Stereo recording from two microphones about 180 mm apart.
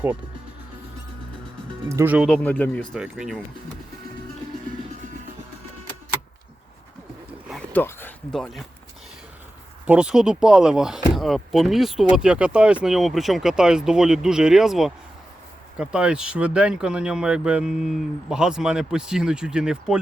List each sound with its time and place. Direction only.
1.9 s speech: 10° right (ahead or behind)
2.2 s speech: 5° left (ahead or behind)
2.9 s speech: 5° right (ahead or behind)
4.9 s music: 45° right (ahead or behind)
7.7 s speech: 10° left (ahead or behind)
9.8 s speech: 5° right (ahead or behind)